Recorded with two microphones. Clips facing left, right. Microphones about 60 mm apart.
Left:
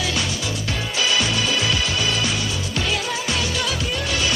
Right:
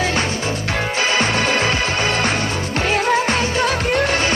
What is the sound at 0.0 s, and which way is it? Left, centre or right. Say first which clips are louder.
Music: right 5 dB; right.